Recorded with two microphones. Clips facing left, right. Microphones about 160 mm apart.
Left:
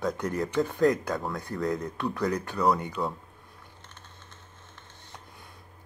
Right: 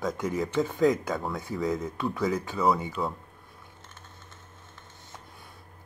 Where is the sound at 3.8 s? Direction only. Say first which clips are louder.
Right 1 dB; centre (ahead or behind).